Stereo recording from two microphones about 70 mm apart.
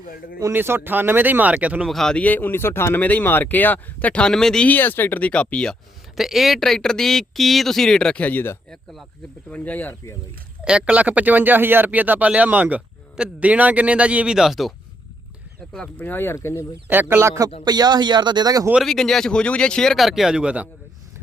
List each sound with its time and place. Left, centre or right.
0.5 s speech: right
1.9 s speech: centre
2.1 s speech: left
4.3 s speech: centre
4.6 s speech: left
6.1 s speech: centre
8.2 s speech: left
10.6 s speech: centre
16.0 s speech: left
16.9 s speech: right
17.7 s speech: right
18.8 s speech: centre
20.0 s speech: centre